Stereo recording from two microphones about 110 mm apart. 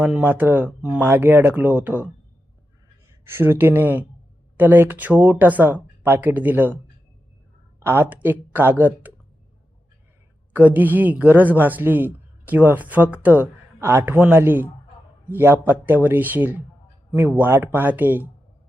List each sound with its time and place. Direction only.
0.0 s a man's voice: 10° right (ahead or behind)
3.2 s a man's voice: 20° right (ahead or behind)
7.8 s speech: 25° right (ahead or behind)
10.5 s a man's voice: 15° right (ahead or behind)